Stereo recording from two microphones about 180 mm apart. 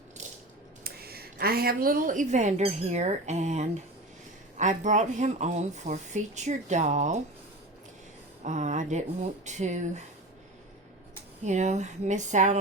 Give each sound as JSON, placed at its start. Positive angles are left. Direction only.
{"t": 0.9, "sound": "a woman's voice", "side_deg": -60}
{"t": 8.4, "sound": "speech", "side_deg": -45}
{"t": 11.4, "sound": "speech", "side_deg": -40}